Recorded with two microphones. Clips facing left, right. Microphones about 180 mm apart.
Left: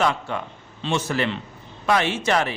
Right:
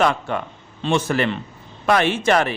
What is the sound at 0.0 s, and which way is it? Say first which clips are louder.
A man's voice: right 3 dB; 55° right (ahead or behind).